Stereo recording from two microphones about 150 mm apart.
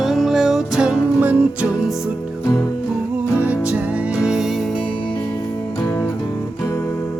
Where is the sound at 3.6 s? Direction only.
10° right (ahead or behind).